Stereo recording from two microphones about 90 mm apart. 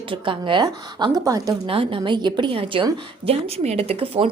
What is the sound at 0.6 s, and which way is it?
Speech, 45° right (ahead or behind).